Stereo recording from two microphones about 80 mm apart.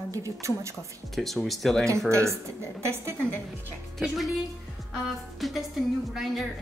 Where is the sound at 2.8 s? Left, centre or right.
Right.